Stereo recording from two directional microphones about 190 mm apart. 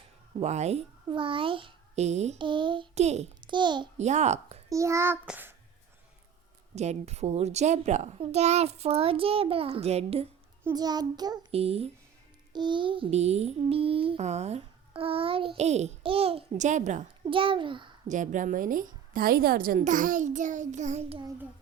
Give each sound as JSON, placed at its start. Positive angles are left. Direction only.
{"t": 0.3, "sound": "a child's voice", "side_deg": -35}
{"t": 3.4, "sound": "a child's voice", "side_deg": -25}
{"t": 3.9, "sound": "a child's voice", "side_deg": -35}
{"t": 4.7, "sound": "a child's voice", "side_deg": -15}
{"t": 6.7, "sound": "a child's voice", "side_deg": -35}
{"t": 10.6, "sound": "a child's voice", "side_deg": -20}
{"t": 11.5, "sound": "a child's voice", "side_deg": -30}
{"t": 17.2, "sound": "a child's voice", "side_deg": -25}
{"t": 18.1, "sound": "a woman's voice", "side_deg": -40}